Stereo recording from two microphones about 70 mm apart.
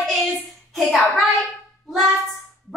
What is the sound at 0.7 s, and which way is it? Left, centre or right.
Speech, centre.